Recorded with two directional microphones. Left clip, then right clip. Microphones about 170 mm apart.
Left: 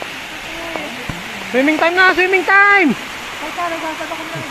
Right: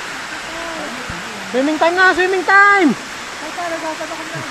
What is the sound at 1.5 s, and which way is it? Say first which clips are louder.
Speech: left 1 dB; 25° right (ahead or behind).